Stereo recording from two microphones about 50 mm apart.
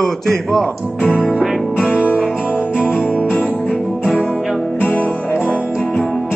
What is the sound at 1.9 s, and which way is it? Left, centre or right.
Music, left.